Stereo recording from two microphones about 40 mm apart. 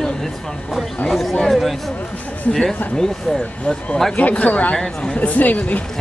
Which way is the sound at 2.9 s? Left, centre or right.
Centre.